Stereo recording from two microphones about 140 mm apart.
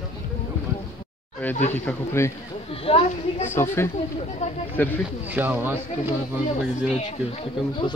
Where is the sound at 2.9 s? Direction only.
45° left (ahead or behind).